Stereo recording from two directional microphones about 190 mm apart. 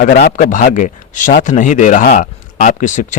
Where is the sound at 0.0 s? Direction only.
55° left (ahead or behind).